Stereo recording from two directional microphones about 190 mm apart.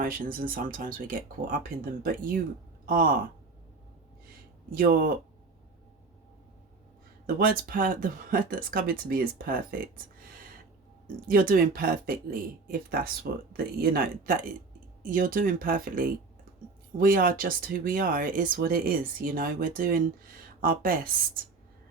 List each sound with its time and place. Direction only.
0.0 s speech: 45° right (ahead or behind)
4.7 s speech: 50° right (ahead or behind)
7.3 s speech: 50° right (ahead or behind)
11.3 s speech: 50° right (ahead or behind)